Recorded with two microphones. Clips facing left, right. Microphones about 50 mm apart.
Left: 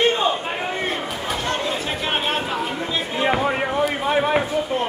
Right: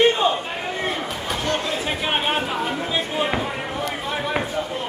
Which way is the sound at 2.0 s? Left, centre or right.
Centre.